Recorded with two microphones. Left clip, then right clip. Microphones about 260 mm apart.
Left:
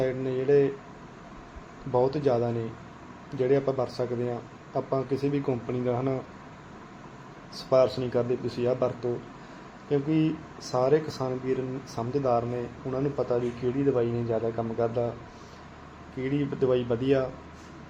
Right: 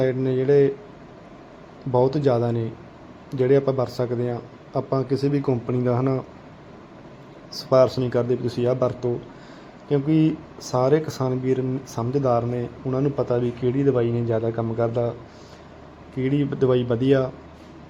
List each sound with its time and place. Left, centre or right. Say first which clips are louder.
0.0 s speech: right 6 dB; right
1.9 s speech: right 5 dB; right
7.5 s speech: right 5 dB; right
16.1 s speech: right 6 dB; right